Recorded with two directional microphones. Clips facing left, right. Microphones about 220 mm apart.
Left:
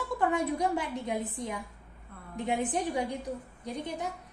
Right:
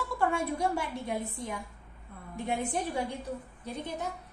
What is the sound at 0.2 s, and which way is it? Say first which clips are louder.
A woman's voice: left 1 dB; 20° left (ahead or behind).